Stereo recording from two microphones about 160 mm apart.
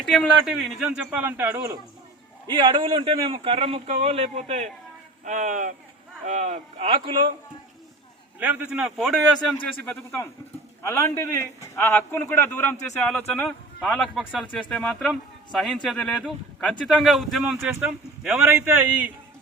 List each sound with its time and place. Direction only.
0.0 s speech: centre (ahead or behind)
2.5 s a man's voice: 30° right (ahead or behind)
8.4 s a man's voice: 10° right (ahead or behind)